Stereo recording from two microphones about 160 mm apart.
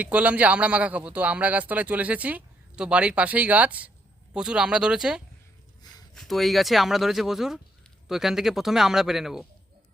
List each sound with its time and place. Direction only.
0.0 s a man's voice: 10° right (ahead or behind)
5.8 s a sound: 25° left (ahead or behind)
6.1 s speech: centre (ahead or behind)